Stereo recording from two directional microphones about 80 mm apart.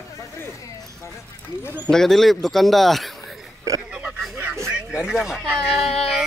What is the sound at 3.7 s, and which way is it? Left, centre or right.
Speech, right.